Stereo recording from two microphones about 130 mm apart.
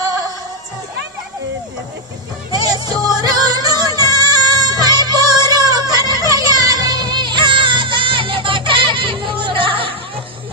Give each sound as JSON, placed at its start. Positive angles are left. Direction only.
{"t": 2.5, "sound": "music", "side_deg": -35}